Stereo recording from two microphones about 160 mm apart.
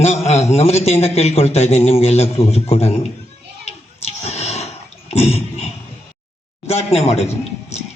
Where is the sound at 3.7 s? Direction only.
45° left (ahead or behind).